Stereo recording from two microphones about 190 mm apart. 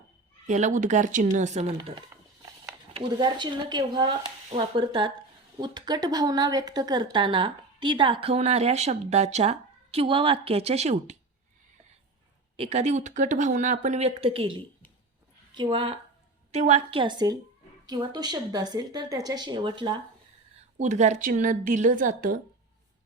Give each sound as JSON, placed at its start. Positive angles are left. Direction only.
{"t": 0.4, "sound": "a woman's voice", "side_deg": -40}
{"t": 12.5, "sound": "a woman's voice", "side_deg": -35}
{"t": 20.7, "sound": "speech", "side_deg": -40}